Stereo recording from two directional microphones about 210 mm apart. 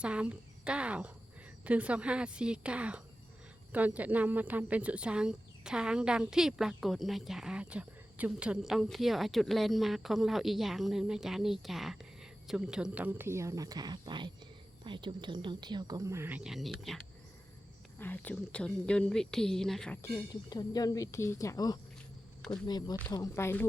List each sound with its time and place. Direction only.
0.0 s a woman's voice: 5° right (ahead or behind)
18.0 s a woman's voice: 10° left (ahead or behind)
22.4 s a sound: 5° left (ahead or behind)
22.6 s a woman's voice: 20° left (ahead or behind)